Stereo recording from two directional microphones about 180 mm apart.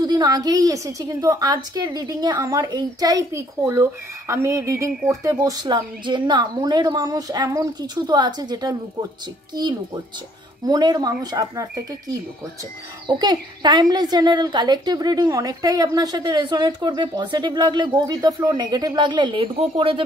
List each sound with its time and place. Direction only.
0.0 s speech: 25° right (ahead or behind)
13.0 s speech: 25° right (ahead or behind)